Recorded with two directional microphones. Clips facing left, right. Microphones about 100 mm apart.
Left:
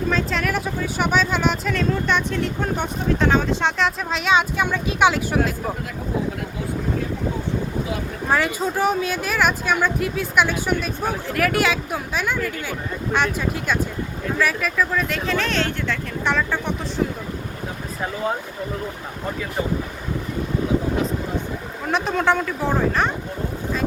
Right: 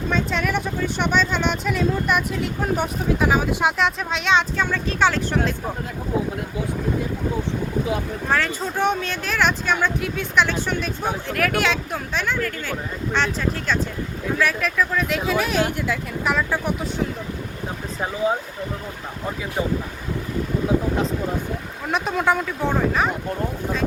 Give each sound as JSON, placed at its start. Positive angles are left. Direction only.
{"t": 0.1, "sound": "speech", "side_deg": 0}
{"t": 8.3, "sound": "speech", "side_deg": 10}
{"t": 21.8, "sound": "speech", "side_deg": 0}